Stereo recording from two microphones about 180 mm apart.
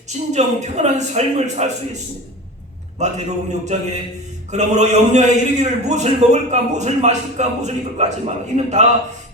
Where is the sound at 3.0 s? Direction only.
40° right (ahead or behind).